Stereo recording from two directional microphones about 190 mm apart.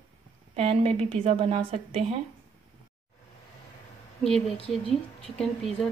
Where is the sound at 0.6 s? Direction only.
30° right (ahead or behind).